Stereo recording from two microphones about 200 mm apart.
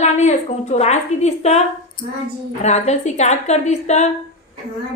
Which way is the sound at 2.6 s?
35° left (ahead or behind).